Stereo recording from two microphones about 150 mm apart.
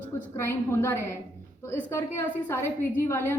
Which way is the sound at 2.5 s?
15° left (ahead or behind).